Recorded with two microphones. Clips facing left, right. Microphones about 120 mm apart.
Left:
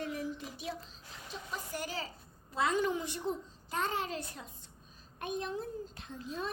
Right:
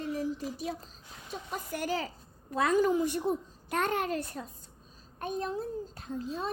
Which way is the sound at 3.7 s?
60° right (ahead or behind).